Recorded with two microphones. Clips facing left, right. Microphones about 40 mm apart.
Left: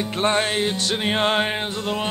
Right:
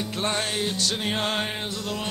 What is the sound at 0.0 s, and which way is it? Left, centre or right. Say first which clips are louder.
Music: left 6 dB; left.